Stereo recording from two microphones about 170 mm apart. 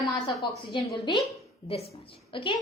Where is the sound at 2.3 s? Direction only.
30° left (ahead or behind).